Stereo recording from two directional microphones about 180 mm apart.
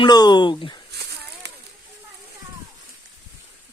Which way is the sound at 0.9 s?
65° right (ahead or behind).